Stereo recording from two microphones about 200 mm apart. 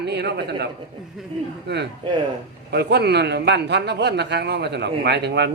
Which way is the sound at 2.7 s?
55° right (ahead or behind).